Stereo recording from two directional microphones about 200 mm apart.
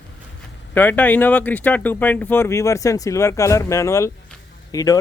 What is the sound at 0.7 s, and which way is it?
Speech, 10° left (ahead or behind).